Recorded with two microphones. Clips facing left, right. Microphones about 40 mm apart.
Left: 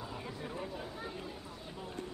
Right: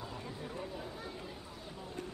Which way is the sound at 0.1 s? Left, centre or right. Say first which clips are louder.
Left 1 dB; centre.